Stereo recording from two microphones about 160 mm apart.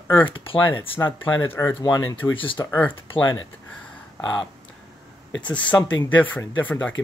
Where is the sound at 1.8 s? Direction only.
30° left (ahead or behind).